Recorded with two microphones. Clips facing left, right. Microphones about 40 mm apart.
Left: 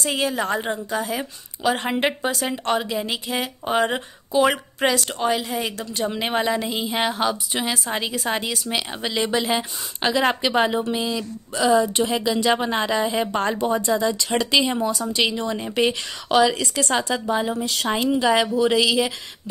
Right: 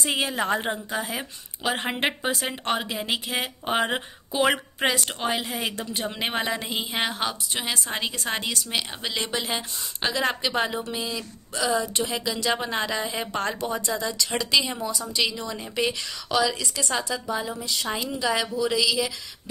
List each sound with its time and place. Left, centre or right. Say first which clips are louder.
0.0 s a woman's voice: left 2 dB; centre
5.5 s a woman's voice: left 3 dB; centre
9.6 s speech: left 4 dB; left
11.6 s speech: left 7 dB; left
15.8 s speech: left 4 dB; left
16.9 s a woman's voice: left 5 dB; left